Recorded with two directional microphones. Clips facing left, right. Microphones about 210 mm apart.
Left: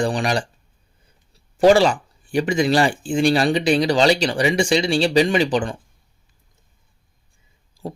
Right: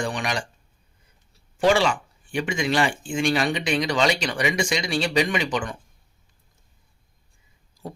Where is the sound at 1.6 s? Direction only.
40° left (ahead or behind).